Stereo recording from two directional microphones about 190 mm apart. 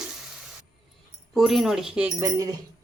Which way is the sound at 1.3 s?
Centre (ahead or behind).